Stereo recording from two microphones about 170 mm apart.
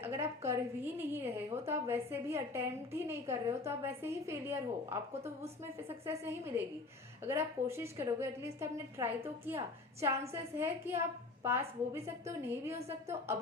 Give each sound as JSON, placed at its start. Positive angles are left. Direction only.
{"t": 0.0, "sound": "a woman's voice", "side_deg": -15}